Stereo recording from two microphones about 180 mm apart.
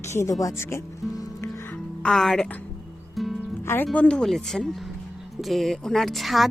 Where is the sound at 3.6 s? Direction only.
15° left (ahead or behind).